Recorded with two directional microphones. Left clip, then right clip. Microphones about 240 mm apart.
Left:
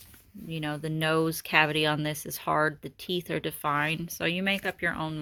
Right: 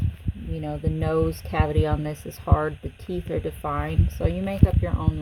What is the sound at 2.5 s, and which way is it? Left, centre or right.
Speech, left.